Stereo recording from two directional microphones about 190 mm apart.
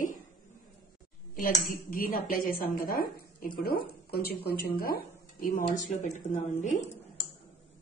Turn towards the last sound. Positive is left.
turn(degrees=40)  # may be behind; listen again after turning